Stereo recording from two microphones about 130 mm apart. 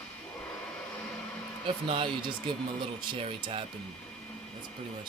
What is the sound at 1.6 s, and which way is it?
Speech, 40° right (ahead or behind).